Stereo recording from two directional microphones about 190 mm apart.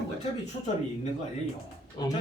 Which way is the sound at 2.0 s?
20° left (ahead or behind).